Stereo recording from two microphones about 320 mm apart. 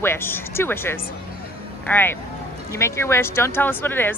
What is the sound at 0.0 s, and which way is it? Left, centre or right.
Speech, centre.